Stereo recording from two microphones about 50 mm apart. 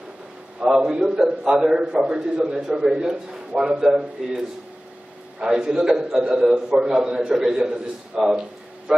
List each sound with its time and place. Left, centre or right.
0.7 s a man's voice: centre
3.5 s a man's voice: right
5.4 s a man's voice: centre